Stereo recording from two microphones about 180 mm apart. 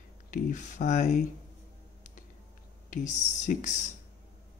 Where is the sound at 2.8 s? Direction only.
45° left (ahead or behind).